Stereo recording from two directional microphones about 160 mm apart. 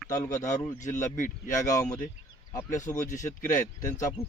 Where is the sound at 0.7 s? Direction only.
50° left (ahead or behind).